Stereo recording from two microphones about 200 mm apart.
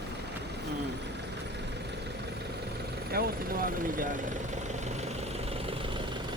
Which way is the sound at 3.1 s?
50° right (ahead or behind).